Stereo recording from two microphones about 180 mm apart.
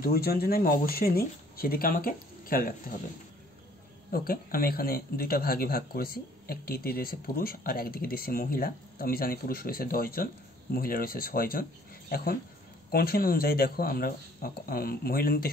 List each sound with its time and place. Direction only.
0.0 s speech: 55° left (ahead or behind)
4.1 s speech: 55° left (ahead or behind)
12.9 s speech: 55° left (ahead or behind)